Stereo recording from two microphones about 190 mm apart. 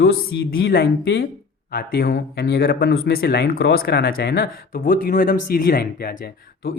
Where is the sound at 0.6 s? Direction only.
55° left (ahead or behind).